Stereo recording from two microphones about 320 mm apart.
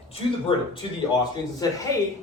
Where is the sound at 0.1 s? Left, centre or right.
Centre.